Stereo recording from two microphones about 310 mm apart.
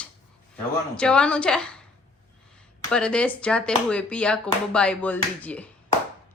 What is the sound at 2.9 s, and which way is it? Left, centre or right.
Speech, centre.